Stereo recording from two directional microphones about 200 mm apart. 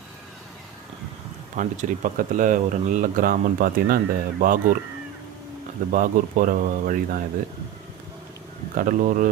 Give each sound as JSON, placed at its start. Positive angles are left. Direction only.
{"t": 1.5, "sound": "speech", "side_deg": -40}
{"t": 5.9, "sound": "speech", "side_deg": -40}
{"t": 8.7, "sound": "speech", "side_deg": -40}